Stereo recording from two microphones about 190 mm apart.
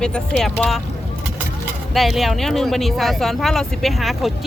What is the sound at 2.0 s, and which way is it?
Speech, centre (ahead or behind).